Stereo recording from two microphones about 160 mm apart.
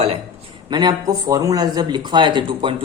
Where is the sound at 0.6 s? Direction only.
30° right (ahead or behind).